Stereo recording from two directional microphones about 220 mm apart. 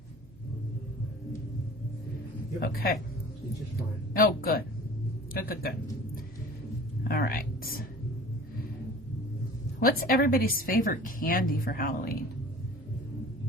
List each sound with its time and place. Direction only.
2.6 s a woman's voice: 40° left (ahead or behind)
4.1 s a woman's voice: 40° left (ahead or behind)
7.1 s speech: 45° left (ahead or behind)
9.8 s a woman's voice: 40° left (ahead or behind)